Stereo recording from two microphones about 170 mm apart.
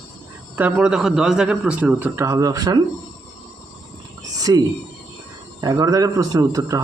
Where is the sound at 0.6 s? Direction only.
10° right (ahead or behind).